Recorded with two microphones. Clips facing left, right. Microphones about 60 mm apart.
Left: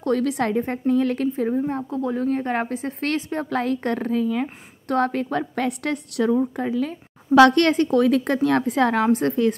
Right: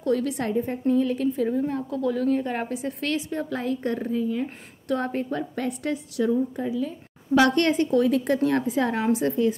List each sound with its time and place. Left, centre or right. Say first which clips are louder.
0.0 s a woman's voice: left 3 dB; left
1.3 s a woman's voice: left 2 dB; left
4.8 s a woman's voice: left 4 dB; left
7.3 s a woman's voice: left 5 dB; left